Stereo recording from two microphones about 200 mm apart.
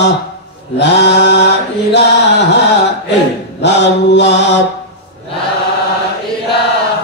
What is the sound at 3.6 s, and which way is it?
Mantra, 60° left (ahead or behind).